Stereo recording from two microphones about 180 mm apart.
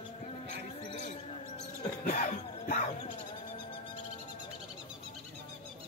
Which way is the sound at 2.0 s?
45° left (ahead or behind).